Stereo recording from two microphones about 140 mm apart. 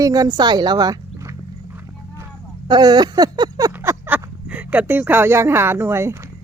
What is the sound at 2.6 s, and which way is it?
Speech, 30° right (ahead or behind).